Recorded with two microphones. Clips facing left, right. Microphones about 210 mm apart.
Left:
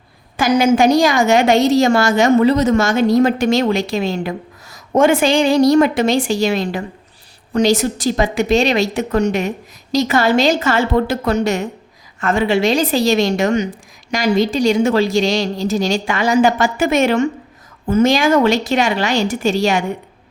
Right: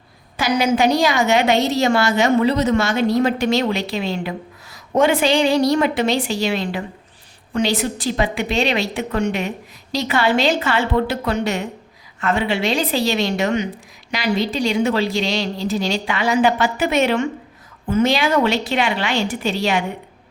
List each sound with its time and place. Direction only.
0.3 s a woman's voice: 45° left (ahead or behind)